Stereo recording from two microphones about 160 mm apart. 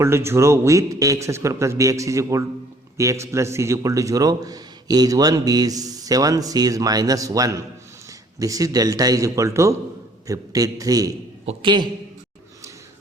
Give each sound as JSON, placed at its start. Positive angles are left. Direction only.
{"t": 0.0, "sound": "a man's voice", "side_deg": -15}